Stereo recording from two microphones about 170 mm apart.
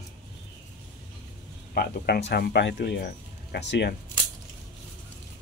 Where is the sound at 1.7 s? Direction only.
60° left (ahead or behind); by 3.9 s 90° left.